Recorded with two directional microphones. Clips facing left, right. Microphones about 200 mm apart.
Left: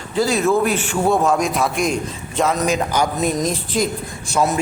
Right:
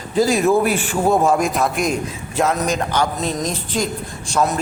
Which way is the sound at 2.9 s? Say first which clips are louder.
Left 1 dB; 10° left (ahead or behind).